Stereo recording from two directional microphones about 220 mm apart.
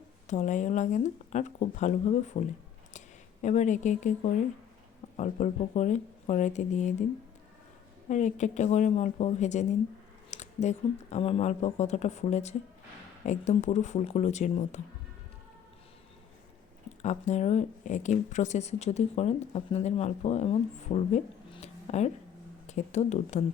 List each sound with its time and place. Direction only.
0.3 s speech: 35° left (ahead or behind)
3.4 s speech: 35° left (ahead or behind)
8.1 s speech: 30° left (ahead or behind)
17.0 s speech: 30° left (ahead or behind)